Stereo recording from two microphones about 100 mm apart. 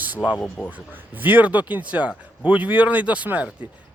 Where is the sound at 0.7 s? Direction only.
20° right (ahead or behind).